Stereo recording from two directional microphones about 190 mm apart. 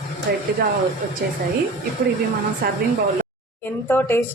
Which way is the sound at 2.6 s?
55° right (ahead or behind).